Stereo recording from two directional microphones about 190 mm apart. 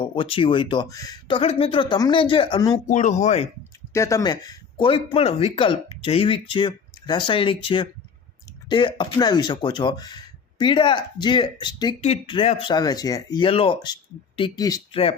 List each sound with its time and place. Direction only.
0.0 s speech: 25° left (ahead or behind)
2.8 s speech: 40° left (ahead or behind)
3.9 s speech: 15° left (ahead or behind)